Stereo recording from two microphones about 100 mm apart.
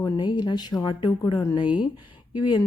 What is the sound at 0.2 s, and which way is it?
Mantra, 50° left (ahead or behind).